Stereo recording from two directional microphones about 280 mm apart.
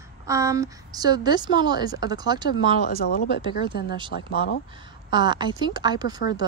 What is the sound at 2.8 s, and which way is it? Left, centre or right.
Speech, left.